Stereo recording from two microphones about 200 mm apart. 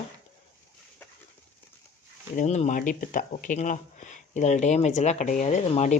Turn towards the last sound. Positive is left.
turn(degrees=35)  # may be behind; listen again after turning